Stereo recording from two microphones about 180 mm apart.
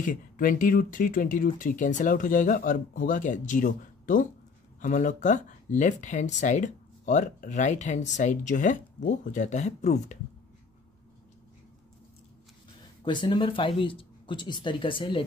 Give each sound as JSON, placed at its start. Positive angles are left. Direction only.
{"t": 0.0, "sound": "speech", "side_deg": 50}
{"t": 13.0, "sound": "speech", "side_deg": 25}